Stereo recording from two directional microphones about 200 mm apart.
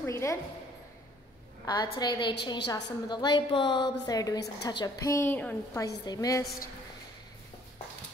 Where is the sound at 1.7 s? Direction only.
20° left (ahead or behind).